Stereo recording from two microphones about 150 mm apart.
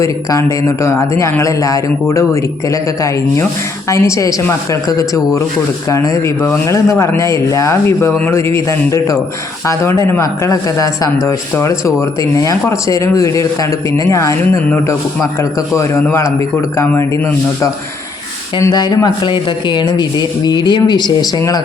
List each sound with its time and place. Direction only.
0.0 s a man's voice: 20° left (ahead or behind)
18.5 s a man's voice: 25° left (ahead or behind)